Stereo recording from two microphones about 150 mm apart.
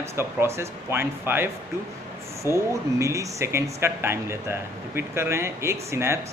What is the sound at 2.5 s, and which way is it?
A man's voice, 20° right (ahead or behind).